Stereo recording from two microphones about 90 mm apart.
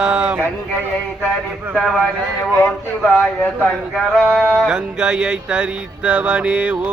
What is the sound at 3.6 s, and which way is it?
Speech, 10° left (ahead or behind).